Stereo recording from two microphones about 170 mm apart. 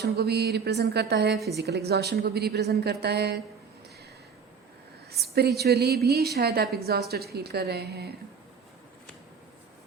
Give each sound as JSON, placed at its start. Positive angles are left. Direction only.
{"t": 0.0, "sound": "a woman's voice", "side_deg": -70}
{"t": 1.4, "sound": "a woman's voice", "side_deg": 0}
{"t": 1.6, "sound": "a woman's voice", "side_deg": -75}
{"t": 5.2, "sound": "a woman's voice", "side_deg": -70}